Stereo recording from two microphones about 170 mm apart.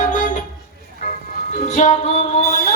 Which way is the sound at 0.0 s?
45° left (ahead or behind).